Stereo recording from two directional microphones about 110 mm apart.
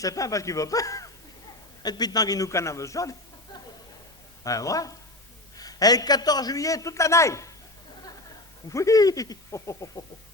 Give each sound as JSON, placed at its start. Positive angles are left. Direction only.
{"t": 0.0, "sound": "a man's voice", "side_deg": 30}
{"t": 4.4, "sound": "a man's voice", "side_deg": 30}
{"t": 8.7, "sound": "a man's voice", "side_deg": 30}